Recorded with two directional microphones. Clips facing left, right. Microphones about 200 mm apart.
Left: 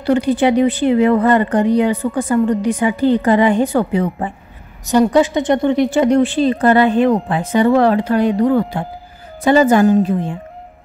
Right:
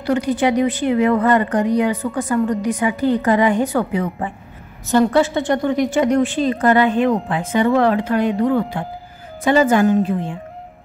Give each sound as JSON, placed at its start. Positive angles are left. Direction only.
{"t": 0.0, "sound": "speech", "side_deg": 30}
{"t": 4.8, "sound": "a woman's voice", "side_deg": 15}